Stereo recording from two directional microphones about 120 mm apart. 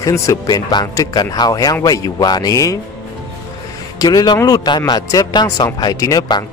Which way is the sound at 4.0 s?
35° left (ahead or behind).